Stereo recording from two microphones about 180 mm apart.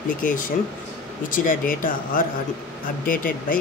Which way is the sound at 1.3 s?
50° left (ahead or behind).